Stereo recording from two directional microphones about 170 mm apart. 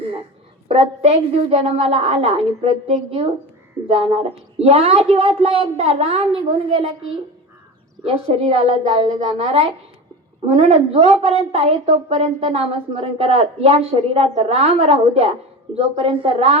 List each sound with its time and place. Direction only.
0.7 s a woman's voice: 35° right (ahead or behind)
8.0 s a woman's voice: 35° right (ahead or behind)